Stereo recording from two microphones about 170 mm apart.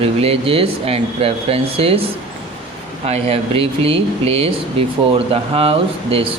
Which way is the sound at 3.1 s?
35° right (ahead or behind).